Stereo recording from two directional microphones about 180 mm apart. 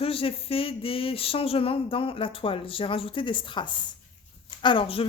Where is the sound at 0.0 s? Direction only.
30° left (ahead or behind).